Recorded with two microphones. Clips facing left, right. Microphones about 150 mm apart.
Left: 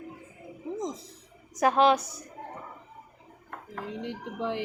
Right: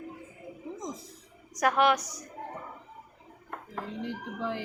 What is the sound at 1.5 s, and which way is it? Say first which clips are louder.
Speech: left 3 dB; 25° left (ahead or behind).